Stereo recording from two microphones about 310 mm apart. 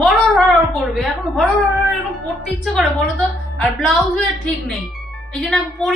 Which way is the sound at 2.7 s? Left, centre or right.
Centre.